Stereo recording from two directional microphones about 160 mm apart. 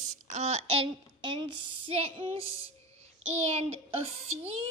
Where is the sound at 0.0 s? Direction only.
45° right (ahead or behind).